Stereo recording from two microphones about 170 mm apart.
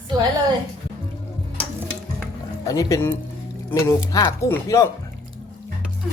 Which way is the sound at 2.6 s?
20° left (ahead or behind).